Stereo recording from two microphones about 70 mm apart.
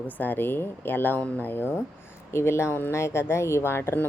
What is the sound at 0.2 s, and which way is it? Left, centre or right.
Speech, left.